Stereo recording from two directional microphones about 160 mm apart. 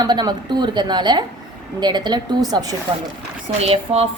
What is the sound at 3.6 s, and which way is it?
Speech, 35° right (ahead or behind).